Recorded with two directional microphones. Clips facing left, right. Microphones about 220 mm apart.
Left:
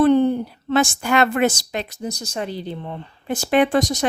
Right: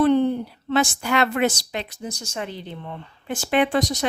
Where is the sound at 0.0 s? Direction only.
45° left (ahead or behind).